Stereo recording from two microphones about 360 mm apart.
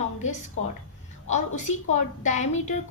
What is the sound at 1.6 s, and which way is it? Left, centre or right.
A woman's voice, centre.